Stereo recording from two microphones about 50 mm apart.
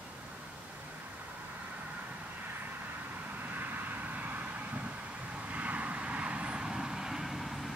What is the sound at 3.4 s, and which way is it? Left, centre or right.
Vehicle, right.